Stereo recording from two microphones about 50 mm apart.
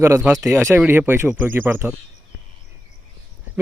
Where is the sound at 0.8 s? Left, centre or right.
Right.